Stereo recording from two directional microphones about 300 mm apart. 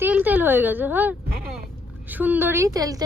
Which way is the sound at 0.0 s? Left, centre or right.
Centre.